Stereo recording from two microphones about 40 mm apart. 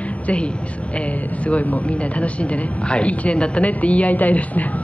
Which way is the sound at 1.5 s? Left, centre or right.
Left.